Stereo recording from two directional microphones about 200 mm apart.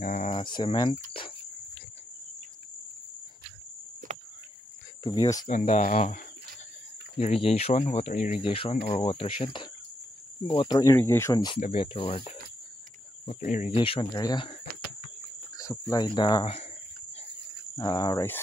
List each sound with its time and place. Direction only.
0.0 s speech: 35° left (ahead or behind)
0.5 s speech: 20° left (ahead or behind)
4.0 s cricket: 40° right (ahead or behind)
5.2 s speech: 20° left (ahead or behind)
5.5 s speech: 40° left (ahead or behind)
8.4 s speech: 25° left (ahead or behind)
13.7 s speech: 25° left (ahead or behind)
15.5 s speech: 15° left (ahead or behind)
17.7 s speech: 20° left (ahead or behind)